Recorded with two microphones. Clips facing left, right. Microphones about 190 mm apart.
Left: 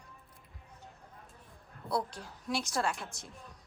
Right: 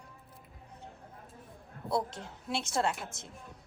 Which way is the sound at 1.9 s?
20° right (ahead or behind).